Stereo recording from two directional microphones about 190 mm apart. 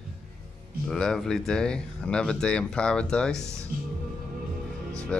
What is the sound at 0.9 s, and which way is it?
Speech, 5° left (ahead or behind).